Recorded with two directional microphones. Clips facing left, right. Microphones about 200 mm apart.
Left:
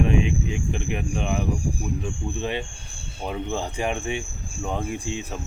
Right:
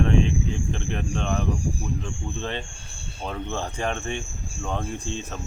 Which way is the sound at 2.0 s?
10° left (ahead or behind).